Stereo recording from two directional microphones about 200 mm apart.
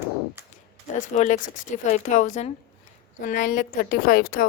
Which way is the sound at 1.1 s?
40° left (ahead or behind).